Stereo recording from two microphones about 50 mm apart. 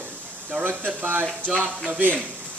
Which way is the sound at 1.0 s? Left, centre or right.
Right.